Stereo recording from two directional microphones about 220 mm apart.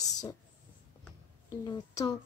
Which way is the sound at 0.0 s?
15° left (ahead or behind).